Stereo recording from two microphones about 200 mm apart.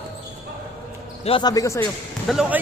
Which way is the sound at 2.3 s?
5° right (ahead or behind).